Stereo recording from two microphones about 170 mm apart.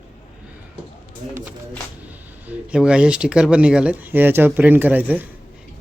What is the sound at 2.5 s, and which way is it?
Speech, 5° right (ahead or behind).